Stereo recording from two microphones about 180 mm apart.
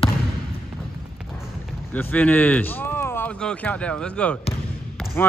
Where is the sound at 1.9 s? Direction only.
10° left (ahead or behind).